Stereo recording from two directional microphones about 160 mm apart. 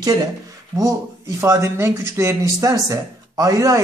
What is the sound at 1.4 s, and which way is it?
Speech, 15° right (ahead or behind).